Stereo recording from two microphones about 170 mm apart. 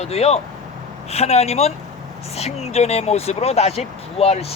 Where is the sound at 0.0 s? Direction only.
40° left (ahead or behind).